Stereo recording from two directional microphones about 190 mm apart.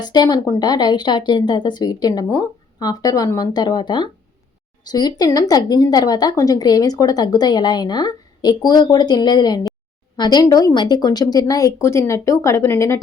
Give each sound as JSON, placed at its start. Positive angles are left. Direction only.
{"t": 0.0, "sound": "a woman's voice", "side_deg": 20}